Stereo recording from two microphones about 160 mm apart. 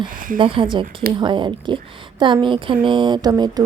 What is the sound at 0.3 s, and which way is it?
A woman's voice, 30° right (ahead or behind).